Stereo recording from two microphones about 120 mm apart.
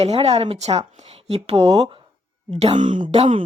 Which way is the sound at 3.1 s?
50° right (ahead or behind).